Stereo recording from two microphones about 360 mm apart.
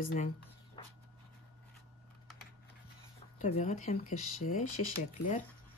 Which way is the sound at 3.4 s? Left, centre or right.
Centre.